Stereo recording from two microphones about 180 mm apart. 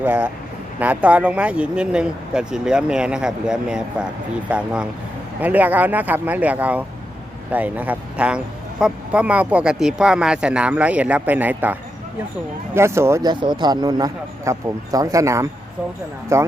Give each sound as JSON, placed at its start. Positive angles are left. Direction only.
{"t": 0.0, "sound": "a man's voice", "side_deg": -10}